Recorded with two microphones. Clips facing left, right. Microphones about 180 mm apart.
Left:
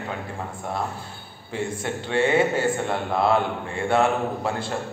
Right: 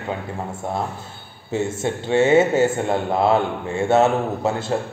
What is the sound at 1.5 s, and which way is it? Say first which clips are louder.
A man's voice: right 5 dB; 25° right (ahead or behind).